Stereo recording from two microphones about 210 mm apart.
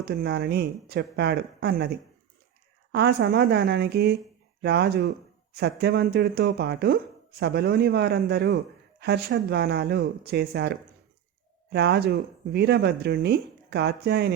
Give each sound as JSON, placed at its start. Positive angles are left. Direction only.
{"t": 0.0, "sound": "speech", "side_deg": -50}
{"t": 2.9, "sound": "speech", "side_deg": -50}